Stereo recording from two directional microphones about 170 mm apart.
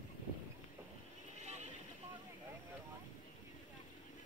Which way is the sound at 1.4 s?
40° right (ahead or behind).